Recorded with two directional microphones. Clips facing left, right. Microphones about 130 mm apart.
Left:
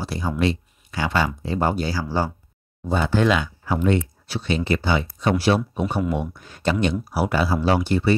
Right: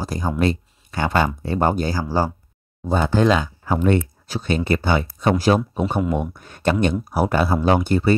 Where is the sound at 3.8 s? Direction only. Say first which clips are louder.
Right 2 dB; 50° right (ahead or behind).